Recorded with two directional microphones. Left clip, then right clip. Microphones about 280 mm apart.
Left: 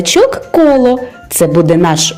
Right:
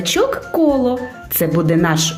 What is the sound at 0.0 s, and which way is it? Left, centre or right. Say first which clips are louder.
Speech: left 7 dB; centre.